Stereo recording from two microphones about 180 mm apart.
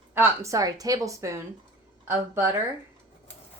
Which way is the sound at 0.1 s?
15° right (ahead or behind).